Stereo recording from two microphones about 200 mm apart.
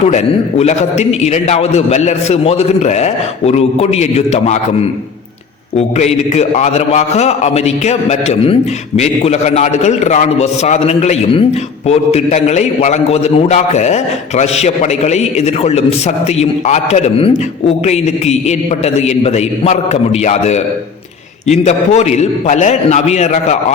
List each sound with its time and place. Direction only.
0.0 s a man's voice: 35° left (ahead or behind)